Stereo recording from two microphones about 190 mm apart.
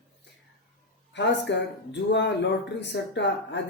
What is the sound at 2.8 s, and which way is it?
Speech, 65° left (ahead or behind).